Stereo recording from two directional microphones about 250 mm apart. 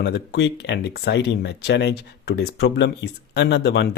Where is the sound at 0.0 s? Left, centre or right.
Left.